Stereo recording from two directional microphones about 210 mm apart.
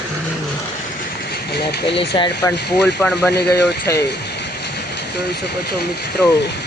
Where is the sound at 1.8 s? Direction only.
25° left (ahead or behind).